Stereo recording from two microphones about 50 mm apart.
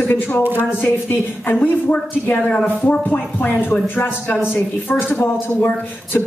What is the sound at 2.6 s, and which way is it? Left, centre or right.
Speech, left.